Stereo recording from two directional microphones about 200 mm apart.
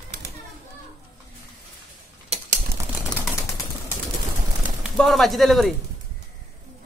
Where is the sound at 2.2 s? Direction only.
35° right (ahead or behind).